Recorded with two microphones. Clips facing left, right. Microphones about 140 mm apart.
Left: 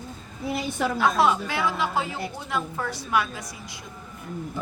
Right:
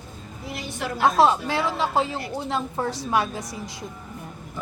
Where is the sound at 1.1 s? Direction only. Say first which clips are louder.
Right 3 dB; 30° right (ahead or behind).